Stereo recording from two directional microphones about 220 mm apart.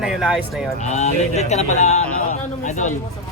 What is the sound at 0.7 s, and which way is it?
A man's voice, 30° left (ahead or behind).